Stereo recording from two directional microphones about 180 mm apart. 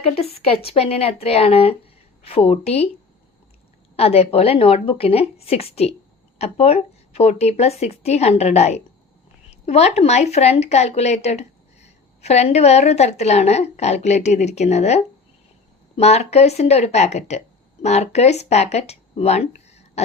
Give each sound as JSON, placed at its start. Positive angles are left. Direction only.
{"t": 0.0, "sound": "a woman's voice", "side_deg": 35}
{"t": 3.9, "sound": "a woman's voice", "side_deg": 35}